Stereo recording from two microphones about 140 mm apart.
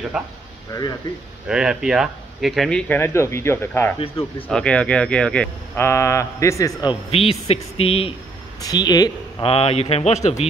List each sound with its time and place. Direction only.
0.1 s speech: 5° right (ahead or behind)
1.5 s speech: 5° right (ahead or behind)
2.9 s speech: 20° left (ahead or behind)
5.9 s speech: 20° left (ahead or behind)
7.1 s a man's voice: 45° left (ahead or behind)
8.5 s speech: 30° left (ahead or behind)
9.4 s a man's voice: 45° left (ahead or behind)